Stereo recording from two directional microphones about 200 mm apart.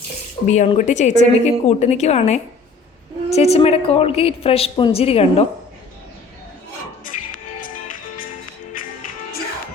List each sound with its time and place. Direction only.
0.4 s a woman's voice: 35° left (ahead or behind)
7.0 s music: 45° left (ahead or behind)